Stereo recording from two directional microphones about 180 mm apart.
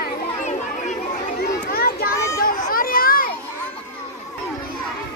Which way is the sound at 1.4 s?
55° left (ahead or behind).